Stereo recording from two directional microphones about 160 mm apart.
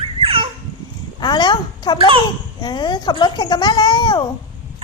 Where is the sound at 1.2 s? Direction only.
25° left (ahead or behind).